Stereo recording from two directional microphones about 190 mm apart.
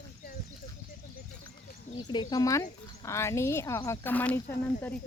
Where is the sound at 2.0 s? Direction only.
20° left (ahead or behind).